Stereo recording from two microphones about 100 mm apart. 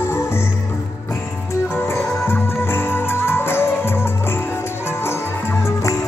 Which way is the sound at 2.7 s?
25° left (ahead or behind).